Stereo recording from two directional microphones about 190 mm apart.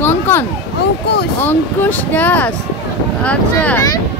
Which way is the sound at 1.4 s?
10° left (ahead or behind).